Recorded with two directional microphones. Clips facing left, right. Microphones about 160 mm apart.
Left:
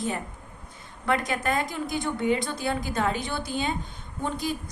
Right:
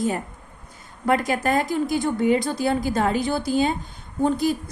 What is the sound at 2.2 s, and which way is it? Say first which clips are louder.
A woman's voice: right 5 dB; 40° right (ahead or behind).